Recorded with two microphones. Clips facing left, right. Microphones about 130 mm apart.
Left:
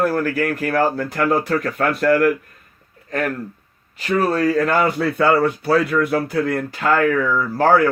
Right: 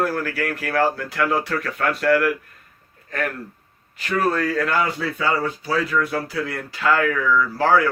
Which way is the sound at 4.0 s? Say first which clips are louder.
Left 3 dB; 40° left (ahead or behind).